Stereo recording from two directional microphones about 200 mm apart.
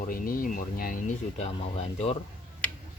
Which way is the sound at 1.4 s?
30° left (ahead or behind).